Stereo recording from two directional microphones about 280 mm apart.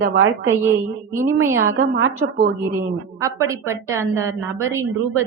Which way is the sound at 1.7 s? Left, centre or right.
Right.